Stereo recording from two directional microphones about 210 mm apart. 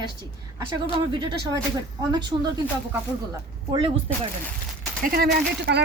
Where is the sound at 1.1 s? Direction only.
20° right (ahead or behind).